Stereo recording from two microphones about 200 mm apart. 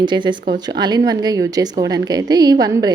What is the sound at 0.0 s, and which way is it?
A woman's voice, 25° right (ahead or behind).